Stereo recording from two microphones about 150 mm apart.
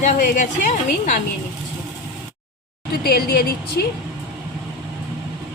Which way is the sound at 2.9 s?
90° left.